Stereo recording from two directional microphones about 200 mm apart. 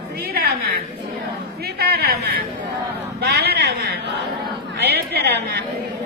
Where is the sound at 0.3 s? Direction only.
50° right (ahead or behind).